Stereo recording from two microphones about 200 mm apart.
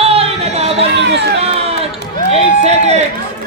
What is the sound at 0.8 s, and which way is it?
Speech, 60° right (ahead or behind).